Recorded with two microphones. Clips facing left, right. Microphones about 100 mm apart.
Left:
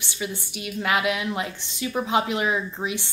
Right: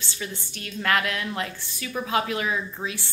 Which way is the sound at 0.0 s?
15° left (ahead or behind).